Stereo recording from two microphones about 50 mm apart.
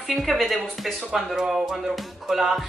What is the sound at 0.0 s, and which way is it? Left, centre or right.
Music, centre.